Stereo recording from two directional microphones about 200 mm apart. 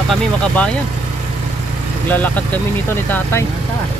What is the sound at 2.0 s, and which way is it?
Speech, 10° left (ahead or behind).